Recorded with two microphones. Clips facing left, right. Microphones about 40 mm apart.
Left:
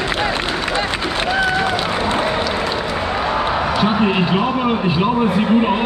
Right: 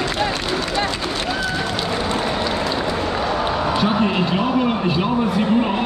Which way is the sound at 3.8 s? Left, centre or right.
Centre.